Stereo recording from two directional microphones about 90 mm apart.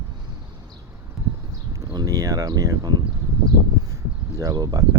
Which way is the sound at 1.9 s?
45° right (ahead or behind).